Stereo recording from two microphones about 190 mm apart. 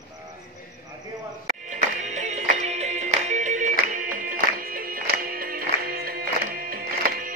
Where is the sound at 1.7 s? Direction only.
40° right (ahead or behind).